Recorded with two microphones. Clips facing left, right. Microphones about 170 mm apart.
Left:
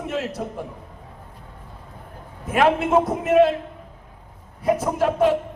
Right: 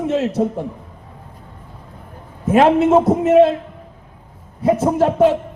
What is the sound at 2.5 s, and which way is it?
A man's voice, 25° right (ahead or behind).